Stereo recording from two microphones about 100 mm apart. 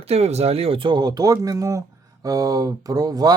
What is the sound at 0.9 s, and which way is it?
Speech, 40° right (ahead or behind).